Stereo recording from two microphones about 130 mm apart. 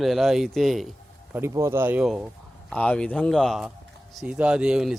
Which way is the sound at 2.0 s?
5° right (ahead or behind).